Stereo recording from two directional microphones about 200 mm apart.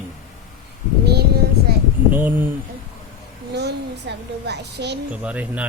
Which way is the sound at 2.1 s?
10° right (ahead or behind).